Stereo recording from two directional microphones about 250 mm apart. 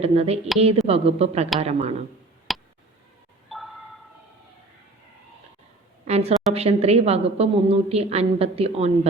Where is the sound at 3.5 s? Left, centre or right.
Centre.